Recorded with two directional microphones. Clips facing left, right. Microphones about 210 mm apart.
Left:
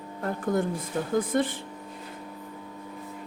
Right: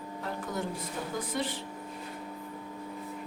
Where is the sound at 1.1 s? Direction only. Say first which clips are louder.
Left 9 dB; 50° left (ahead or behind).